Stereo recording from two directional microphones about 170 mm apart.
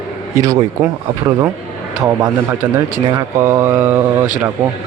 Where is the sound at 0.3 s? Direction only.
15° right (ahead or behind).